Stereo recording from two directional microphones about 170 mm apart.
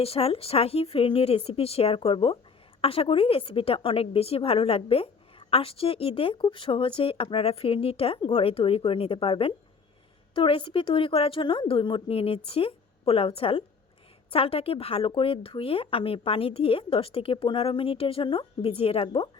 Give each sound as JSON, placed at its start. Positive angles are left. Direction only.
{"t": 0.0, "sound": "a woman's voice", "side_deg": 35}